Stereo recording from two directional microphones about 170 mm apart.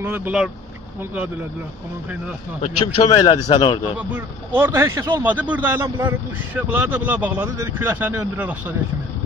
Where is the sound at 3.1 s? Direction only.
25° left (ahead or behind).